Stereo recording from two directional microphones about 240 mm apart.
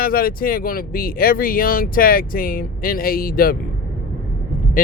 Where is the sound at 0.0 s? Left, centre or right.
Left.